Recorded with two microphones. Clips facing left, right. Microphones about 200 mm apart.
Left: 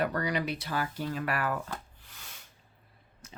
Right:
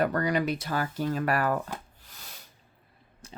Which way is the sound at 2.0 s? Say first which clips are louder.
Right 2 dB; 35° right (ahead or behind).